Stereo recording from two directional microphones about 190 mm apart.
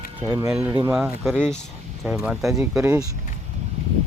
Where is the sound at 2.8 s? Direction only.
15° right (ahead or behind).